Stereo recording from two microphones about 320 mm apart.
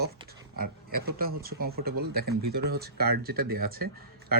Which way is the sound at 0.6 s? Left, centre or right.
Right.